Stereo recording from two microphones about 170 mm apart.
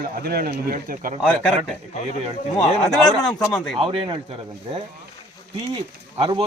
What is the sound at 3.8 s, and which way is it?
Speech, 30° right (ahead or behind).